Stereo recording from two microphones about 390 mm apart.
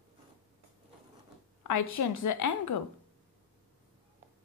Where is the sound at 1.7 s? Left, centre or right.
Left.